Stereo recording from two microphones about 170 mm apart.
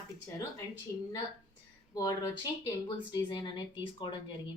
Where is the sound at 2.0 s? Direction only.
20° left (ahead or behind).